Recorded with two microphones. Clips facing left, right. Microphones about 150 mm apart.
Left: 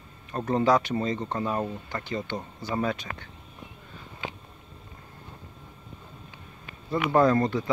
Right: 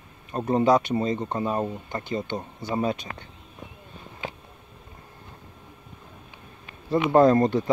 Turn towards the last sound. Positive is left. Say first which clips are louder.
# right 4 dB
turn(degrees=-25)  # may be behind; listen again after turning